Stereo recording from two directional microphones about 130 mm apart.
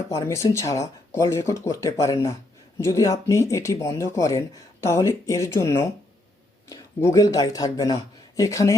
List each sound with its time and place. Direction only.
0.1 s speech: 25° left (ahead or behind)